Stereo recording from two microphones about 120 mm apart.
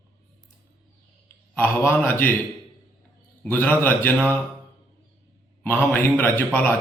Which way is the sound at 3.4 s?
15° left (ahead or behind).